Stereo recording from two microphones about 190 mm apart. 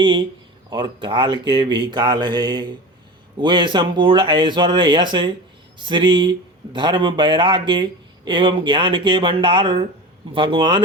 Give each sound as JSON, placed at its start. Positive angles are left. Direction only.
{"t": 0.7, "sound": "speech", "side_deg": -25}